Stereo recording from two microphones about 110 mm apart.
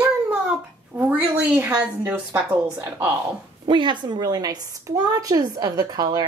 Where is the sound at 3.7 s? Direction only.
45° right (ahead or behind).